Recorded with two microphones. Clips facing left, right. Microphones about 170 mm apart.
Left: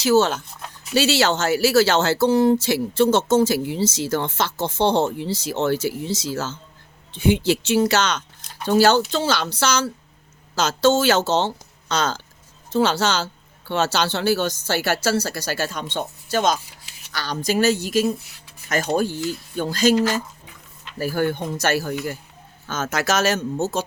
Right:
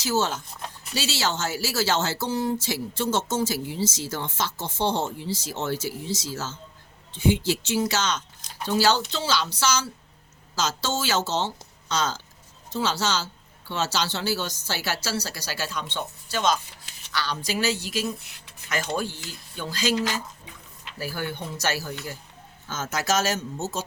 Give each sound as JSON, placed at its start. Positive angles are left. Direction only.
{"t": 0.0, "sound": "speech", "side_deg": 70}
{"t": 8.6, "sound": "speech", "side_deg": 55}
{"t": 22.6, "sound": "speech", "side_deg": 70}